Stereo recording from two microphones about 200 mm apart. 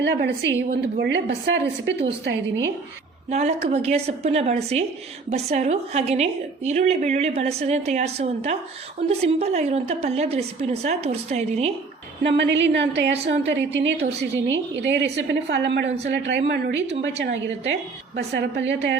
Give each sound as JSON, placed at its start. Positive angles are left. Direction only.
{"t": 0.0, "sound": "a woman's voice", "side_deg": -60}
{"t": 3.2, "sound": "a woman's voice", "side_deg": -35}
{"t": 12.2, "sound": "a woman's voice", "side_deg": -60}
{"t": 18.2, "sound": "a woman's voice", "side_deg": -60}